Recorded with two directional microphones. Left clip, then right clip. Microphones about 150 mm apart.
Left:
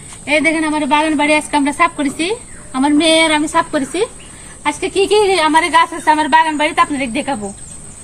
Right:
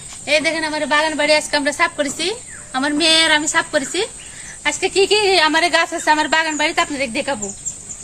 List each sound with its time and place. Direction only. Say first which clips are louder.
0.3 s speech: left 3 dB; 20° right (ahead or behind)